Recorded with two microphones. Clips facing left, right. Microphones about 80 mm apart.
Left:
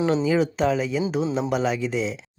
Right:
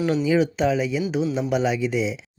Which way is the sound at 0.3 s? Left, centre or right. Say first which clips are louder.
Right 1 dB; centre.